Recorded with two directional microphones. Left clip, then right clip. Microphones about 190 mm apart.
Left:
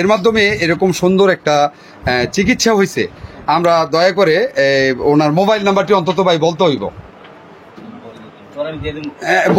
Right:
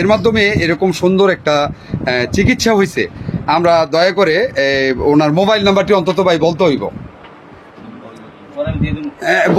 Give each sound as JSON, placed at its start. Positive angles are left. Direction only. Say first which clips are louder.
{"t": 0.0, "sound": "speech", "louder": "even", "side_deg": 0}
{"t": 9.2, "sound": "speech", "louder": "even", "side_deg": -20}